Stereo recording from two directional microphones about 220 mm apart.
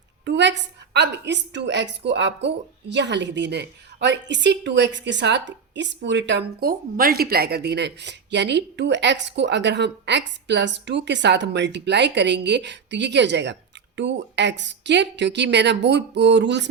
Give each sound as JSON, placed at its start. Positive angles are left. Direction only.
{"t": 0.3, "sound": "a woman's voice", "side_deg": -55}